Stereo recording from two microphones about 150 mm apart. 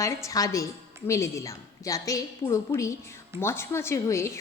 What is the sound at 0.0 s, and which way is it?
A woman's voice, 20° left (ahead or behind).